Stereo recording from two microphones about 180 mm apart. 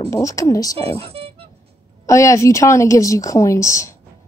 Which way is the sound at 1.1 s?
35° right (ahead or behind).